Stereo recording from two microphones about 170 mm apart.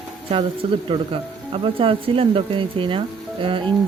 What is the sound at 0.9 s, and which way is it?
Speech, 30° right (ahead or behind).